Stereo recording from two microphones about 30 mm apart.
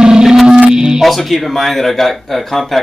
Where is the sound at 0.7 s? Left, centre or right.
Right.